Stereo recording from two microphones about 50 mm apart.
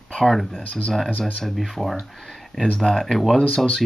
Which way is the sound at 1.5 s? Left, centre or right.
Centre.